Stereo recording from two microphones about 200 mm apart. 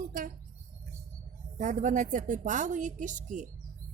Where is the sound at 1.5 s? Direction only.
40° right (ahead or behind).